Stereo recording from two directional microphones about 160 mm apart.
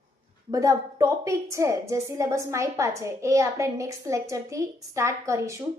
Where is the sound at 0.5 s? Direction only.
20° right (ahead or behind).